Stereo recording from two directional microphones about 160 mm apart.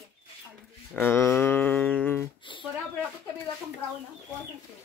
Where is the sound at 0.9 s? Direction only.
15° left (ahead or behind).